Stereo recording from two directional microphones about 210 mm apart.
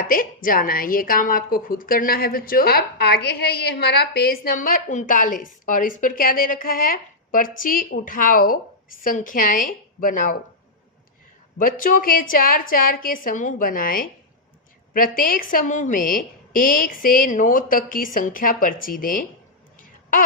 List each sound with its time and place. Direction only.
0.0 s a woman's voice: 40° left (ahead or behind)
11.5 s a woman's voice: 40° left (ahead or behind)